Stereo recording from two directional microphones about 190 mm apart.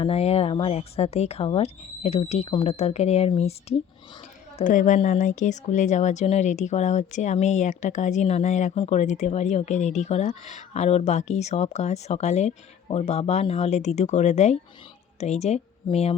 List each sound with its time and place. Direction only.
0.0 s speech: 30° left (ahead or behind)
4.5 s a woman's voice: 45° left (ahead or behind)